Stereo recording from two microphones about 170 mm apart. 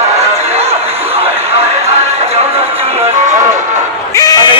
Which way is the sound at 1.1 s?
35° right (ahead or behind).